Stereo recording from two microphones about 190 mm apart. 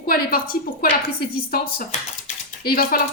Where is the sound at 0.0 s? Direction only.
50° left (ahead or behind).